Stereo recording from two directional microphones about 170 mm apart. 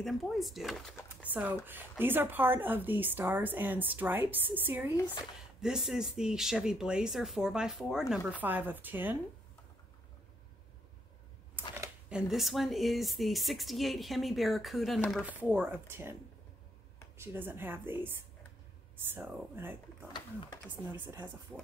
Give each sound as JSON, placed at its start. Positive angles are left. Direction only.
{"t": 0.0, "sound": "a woman's voice", "side_deg": 0}
{"t": 1.2, "sound": "a woman's voice", "side_deg": -10}
{"t": 12.1, "sound": "a woman's voice", "side_deg": -5}
{"t": 17.2, "sound": "speech", "side_deg": -15}
{"t": 20.1, "sound": "speech", "side_deg": 25}
{"t": 20.8, "sound": "speech", "side_deg": -10}